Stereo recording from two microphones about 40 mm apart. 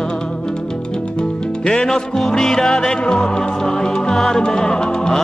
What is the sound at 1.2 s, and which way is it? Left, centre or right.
Music, centre.